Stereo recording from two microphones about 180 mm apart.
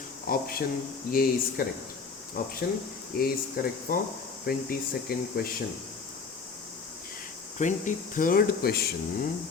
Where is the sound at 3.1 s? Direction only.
55° left (ahead or behind).